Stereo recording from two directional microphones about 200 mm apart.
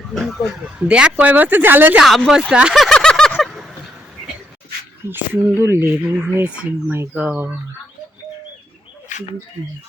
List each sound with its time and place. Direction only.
0.1 s speech: centre (ahead or behind)
5.0 s speech: 10° right (ahead or behind)
9.1 s a sound: 40° left (ahead or behind)